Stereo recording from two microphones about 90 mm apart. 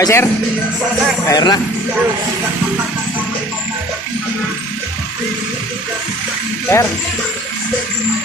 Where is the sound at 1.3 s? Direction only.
50° left (ahead or behind).